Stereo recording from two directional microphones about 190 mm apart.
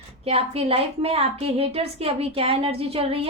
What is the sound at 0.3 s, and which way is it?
A woman's voice, 30° right (ahead or behind).